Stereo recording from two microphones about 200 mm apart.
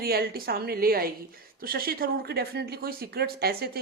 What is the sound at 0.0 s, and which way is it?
Speech, 50° right (ahead or behind).